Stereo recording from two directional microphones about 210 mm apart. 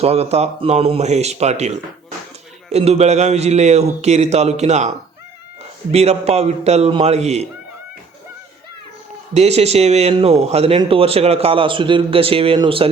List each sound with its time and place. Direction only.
0.0 s a man's voice: 30° right (ahead or behind)
5.9 s a man's voice: 30° right (ahead or behind)
9.3 s a man's voice: 30° right (ahead or behind)